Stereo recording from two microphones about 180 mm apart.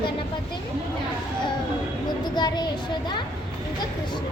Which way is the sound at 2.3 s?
25° left (ahead or behind).